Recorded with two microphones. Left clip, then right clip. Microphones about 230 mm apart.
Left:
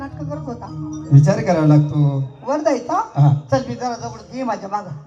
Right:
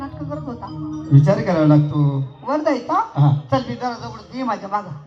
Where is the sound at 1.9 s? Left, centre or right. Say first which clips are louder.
Even; left.